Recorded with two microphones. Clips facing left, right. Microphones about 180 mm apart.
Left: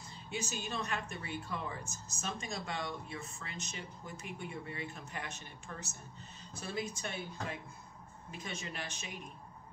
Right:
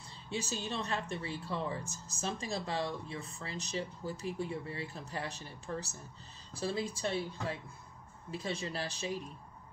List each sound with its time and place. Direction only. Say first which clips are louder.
0.3 s a woman's voice: right 2 dB; 30° right (ahead or behind)